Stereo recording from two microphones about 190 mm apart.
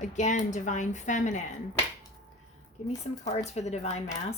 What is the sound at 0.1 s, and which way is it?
Speech, 40° left (ahead or behind).